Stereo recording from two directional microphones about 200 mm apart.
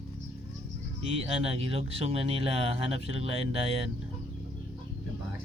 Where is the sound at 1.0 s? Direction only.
30° right (ahead or behind).